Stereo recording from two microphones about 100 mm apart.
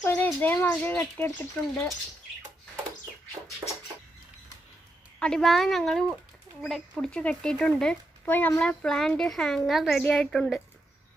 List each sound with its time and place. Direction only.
0.0 s speech: 15° left (ahead or behind)
1.7 s a woman's voice: 5° left (ahead or behind)
5.2 s a woman's voice: 5° left (ahead or behind)
8.3 s a woman's voice: 20° left (ahead or behind)